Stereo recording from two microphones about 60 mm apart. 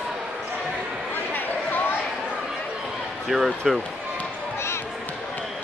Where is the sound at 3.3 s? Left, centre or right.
Centre.